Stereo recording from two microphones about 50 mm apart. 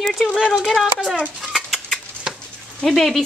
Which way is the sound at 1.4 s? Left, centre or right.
Centre.